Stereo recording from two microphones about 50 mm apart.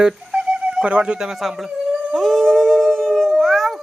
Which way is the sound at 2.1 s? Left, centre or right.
Centre.